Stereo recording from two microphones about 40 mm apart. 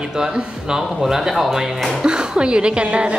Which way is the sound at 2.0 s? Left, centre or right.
Right.